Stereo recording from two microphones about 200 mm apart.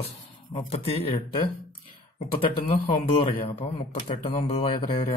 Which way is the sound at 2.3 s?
25° left (ahead or behind).